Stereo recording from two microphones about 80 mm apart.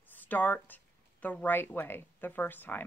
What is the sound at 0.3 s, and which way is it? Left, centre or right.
Speech, left.